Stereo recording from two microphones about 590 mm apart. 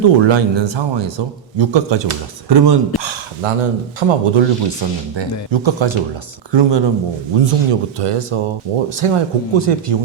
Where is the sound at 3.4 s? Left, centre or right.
Right.